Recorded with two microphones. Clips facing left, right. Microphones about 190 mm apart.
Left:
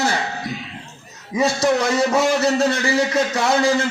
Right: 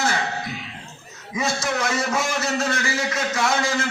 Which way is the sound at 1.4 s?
35° left (ahead or behind).